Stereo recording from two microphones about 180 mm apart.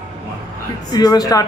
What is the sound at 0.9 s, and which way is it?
Speech, 20° left (ahead or behind).